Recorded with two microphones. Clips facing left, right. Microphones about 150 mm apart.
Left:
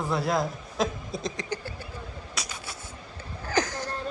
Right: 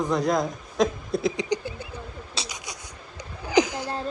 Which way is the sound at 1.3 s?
15° right (ahead or behind).